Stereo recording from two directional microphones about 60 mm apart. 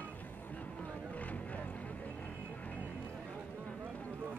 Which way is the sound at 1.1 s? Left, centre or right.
Left.